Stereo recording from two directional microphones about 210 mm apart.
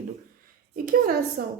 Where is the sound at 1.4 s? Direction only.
45° right (ahead or behind).